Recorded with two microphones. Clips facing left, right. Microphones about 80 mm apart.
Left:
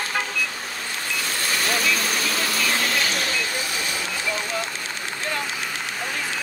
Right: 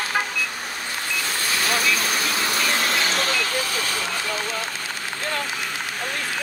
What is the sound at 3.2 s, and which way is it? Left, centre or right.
Vehicle, right.